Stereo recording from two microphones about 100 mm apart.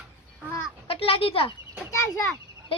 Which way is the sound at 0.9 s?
70° left (ahead or behind).